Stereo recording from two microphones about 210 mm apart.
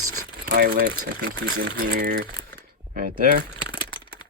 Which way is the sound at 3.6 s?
25° left (ahead or behind).